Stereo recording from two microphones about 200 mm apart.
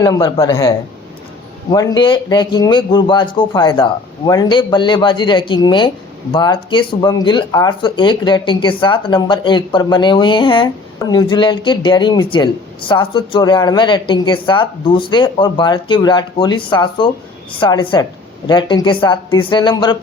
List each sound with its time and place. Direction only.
0.0 s speech: 20° left (ahead or behind)
1.7 s speech: 20° left (ahead or behind)